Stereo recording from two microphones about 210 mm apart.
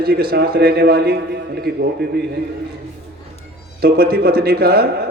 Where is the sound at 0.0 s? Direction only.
45° right (ahead or behind).